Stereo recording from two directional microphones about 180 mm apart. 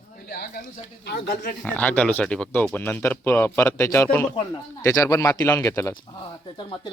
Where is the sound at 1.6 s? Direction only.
10° left (ahead or behind).